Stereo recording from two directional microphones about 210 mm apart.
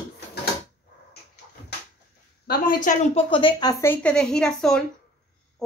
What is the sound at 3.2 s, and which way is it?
A woman's voice, 25° left (ahead or behind).